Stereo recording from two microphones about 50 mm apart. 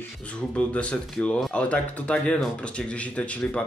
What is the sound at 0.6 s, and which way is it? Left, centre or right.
Speech, left.